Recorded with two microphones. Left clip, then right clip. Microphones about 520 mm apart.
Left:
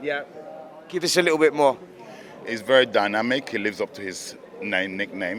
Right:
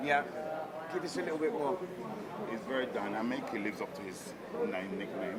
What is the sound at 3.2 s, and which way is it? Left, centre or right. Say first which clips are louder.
Speech: left 12 dB; left.